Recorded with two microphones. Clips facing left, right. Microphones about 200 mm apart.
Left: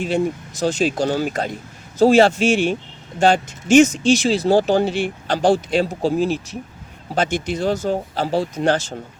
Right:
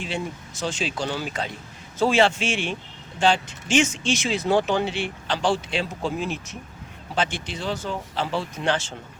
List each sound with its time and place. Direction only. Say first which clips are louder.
0.6 s speech: left 9 dB; 40° left (ahead or behind)